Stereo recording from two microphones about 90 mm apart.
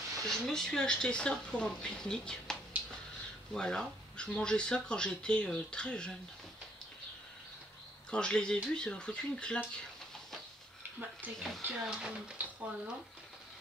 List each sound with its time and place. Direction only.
0.3 s speech: 5° left (ahead or behind)
3.5 s speech: 5° left (ahead or behind)
8.1 s speech: 10° left (ahead or behind)
11.0 s speech: 20° right (ahead or behind)
11.3 s speech: 5° left (ahead or behind)
11.6 s speech: 10° right (ahead or behind)